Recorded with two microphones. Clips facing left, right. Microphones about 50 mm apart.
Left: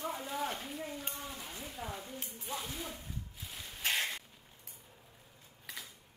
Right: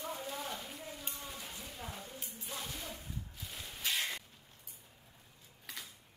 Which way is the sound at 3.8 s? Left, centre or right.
Left.